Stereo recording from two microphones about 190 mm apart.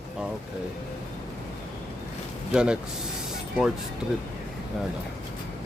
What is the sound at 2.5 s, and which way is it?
Speech, 5° right (ahead or behind).